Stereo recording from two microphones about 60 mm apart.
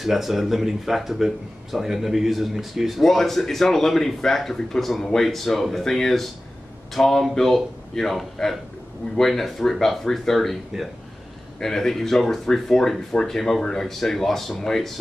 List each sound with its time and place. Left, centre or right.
0.0 s speech: centre
11.6 s speech: centre